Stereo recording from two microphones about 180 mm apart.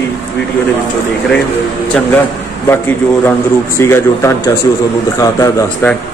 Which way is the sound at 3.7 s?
15° left (ahead or behind).